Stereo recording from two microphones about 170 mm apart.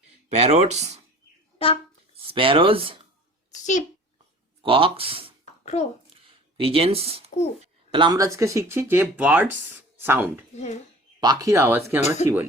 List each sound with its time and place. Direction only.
0.3 s speech: 40° right (ahead or behind)
1.5 s speech: 35° left (ahead or behind)
2.1 s speech: 30° right (ahead or behind)
3.5 s a child's voice: 45° left (ahead or behind)
4.6 s speech: 30° right (ahead or behind)
5.7 s speech: 40° left (ahead or behind)
6.2 s speech: 35° right (ahead or behind); by 10.4 s 10° right (ahead or behind)
11.2 s speech: 20° right (ahead or behind)
11.9 s speech: 40° left (ahead or behind)